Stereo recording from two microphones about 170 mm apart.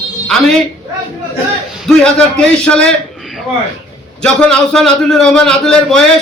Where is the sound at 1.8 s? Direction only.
5° left (ahead or behind).